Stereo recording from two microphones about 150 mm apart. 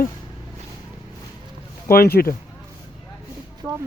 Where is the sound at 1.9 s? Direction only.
85° left.